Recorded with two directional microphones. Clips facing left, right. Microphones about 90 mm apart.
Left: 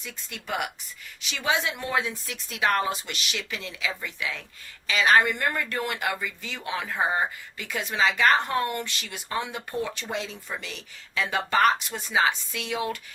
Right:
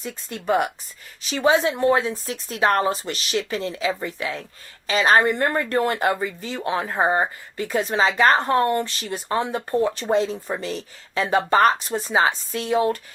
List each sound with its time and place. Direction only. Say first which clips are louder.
0.0 s speech: right 10 dB; 35° right (ahead or behind)